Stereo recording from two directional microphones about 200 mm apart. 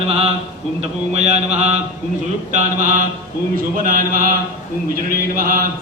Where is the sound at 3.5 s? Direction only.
45° right (ahead or behind).